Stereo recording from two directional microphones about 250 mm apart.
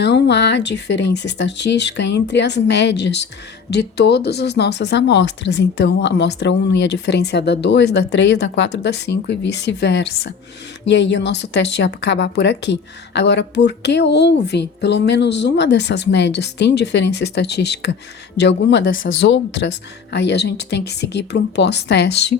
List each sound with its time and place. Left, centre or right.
0.0 s speech: left